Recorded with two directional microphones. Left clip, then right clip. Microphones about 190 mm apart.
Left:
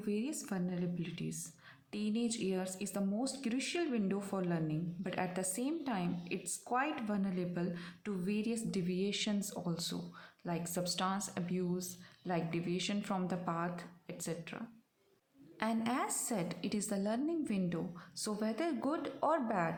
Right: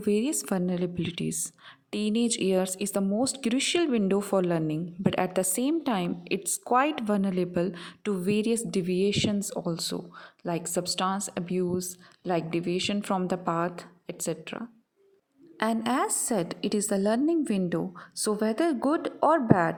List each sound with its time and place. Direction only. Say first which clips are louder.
0.0 s speech: right 12 dB; 55° right (ahead or behind)